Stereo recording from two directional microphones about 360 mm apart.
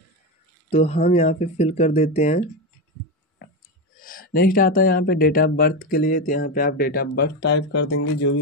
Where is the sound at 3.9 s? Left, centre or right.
Left.